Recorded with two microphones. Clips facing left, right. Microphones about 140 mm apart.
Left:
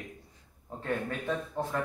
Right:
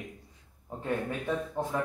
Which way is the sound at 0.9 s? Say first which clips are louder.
Right 1 dB; 10° right (ahead or behind).